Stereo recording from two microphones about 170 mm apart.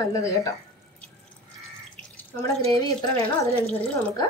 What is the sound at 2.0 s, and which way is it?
Water tap, 10° left (ahead or behind).